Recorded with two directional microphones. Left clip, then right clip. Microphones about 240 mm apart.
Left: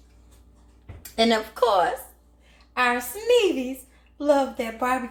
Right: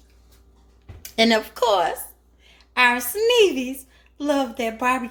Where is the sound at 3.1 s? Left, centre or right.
Right.